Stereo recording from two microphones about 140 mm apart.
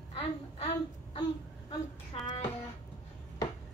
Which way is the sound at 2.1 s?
45° left (ahead or behind).